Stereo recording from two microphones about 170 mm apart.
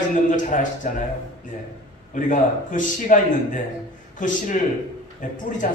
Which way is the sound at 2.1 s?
50° left (ahead or behind).